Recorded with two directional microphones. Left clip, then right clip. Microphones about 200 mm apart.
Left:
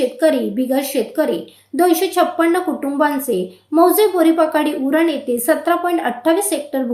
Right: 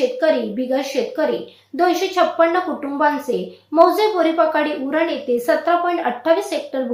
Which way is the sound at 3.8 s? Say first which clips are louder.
Left 1 dB; 45° left (ahead or behind).